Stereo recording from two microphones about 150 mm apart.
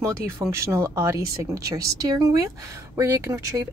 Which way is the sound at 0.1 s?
20° right (ahead or behind).